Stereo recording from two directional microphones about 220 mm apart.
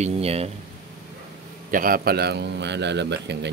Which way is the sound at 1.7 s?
40° right (ahead or behind).